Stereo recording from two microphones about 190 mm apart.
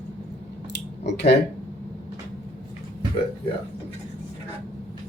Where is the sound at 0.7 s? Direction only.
65° left (ahead or behind).